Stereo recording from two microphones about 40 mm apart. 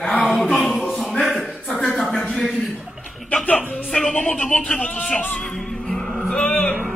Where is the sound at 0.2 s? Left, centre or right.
Centre.